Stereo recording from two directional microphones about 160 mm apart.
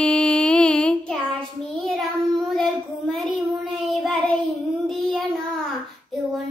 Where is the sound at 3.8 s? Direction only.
Centre (ahead or behind).